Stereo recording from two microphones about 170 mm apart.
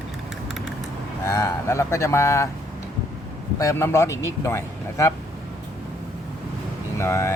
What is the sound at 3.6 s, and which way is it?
Speech, 15° left (ahead or behind).